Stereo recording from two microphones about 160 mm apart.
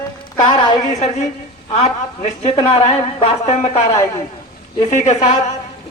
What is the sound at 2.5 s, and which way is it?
Speech, 35° left (ahead or behind).